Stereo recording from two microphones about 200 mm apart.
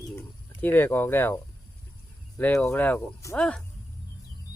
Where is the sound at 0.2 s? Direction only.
10° left (ahead or behind).